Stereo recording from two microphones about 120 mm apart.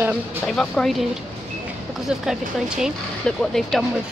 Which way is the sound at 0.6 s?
Centre (ahead or behind).